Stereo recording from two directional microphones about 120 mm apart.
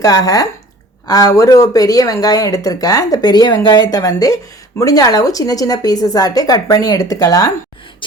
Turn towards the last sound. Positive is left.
turn(degrees=30)  # may be behind; listen again after turning